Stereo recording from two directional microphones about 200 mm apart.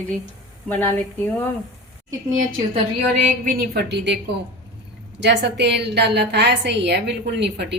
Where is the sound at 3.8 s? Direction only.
60° right (ahead or behind).